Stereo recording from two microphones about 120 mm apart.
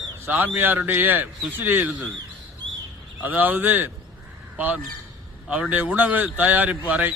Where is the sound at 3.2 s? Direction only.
15° right (ahead or behind).